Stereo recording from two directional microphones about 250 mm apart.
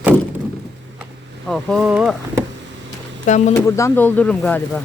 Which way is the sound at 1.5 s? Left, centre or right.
Centre.